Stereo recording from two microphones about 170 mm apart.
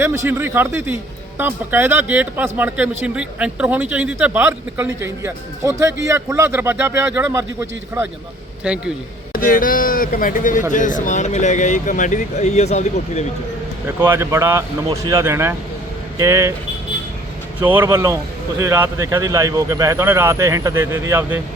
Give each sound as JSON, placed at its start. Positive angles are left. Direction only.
{"t": 0.0, "sound": "speech", "side_deg": -15}
{"t": 9.3, "sound": "a man's voice", "side_deg": 55}
{"t": 13.8, "sound": "speech", "side_deg": -15}
{"t": 17.6, "sound": "speech", "side_deg": -10}